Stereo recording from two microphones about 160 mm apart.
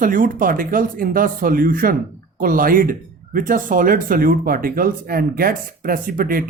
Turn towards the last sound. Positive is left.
turn(degrees=-65)  # may be behind; listen again after turning